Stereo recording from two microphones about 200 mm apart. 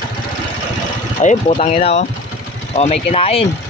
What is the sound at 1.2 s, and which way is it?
Speech, 35° left (ahead or behind).